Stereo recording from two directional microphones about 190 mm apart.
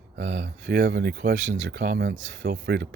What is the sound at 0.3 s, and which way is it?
Speech, 60° right (ahead or behind).